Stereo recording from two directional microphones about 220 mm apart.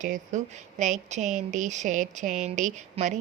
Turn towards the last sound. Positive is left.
turn(degrees=-35)  # may be behind; listen again after turning